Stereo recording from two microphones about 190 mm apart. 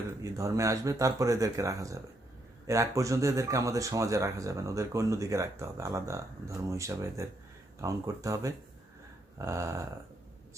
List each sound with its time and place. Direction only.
0.2 s speech: 15° right (ahead or behind)